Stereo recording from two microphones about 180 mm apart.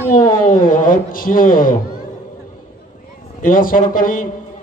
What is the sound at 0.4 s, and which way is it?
A man's voice, 50° left (ahead or behind).